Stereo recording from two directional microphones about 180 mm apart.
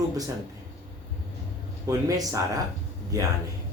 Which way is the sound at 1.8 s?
20° right (ahead or behind).